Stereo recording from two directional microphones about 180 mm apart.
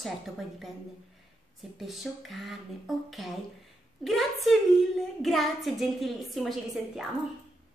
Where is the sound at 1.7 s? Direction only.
Centre (ahead or behind).